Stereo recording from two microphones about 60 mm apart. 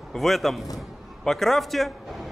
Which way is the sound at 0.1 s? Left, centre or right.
Centre.